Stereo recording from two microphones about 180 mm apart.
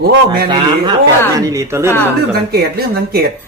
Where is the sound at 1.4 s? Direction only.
15° right (ahead or behind).